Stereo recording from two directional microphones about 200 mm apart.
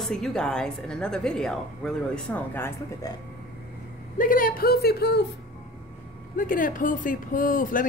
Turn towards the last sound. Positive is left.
turn(degrees=45)  # may be behind; listen again after turning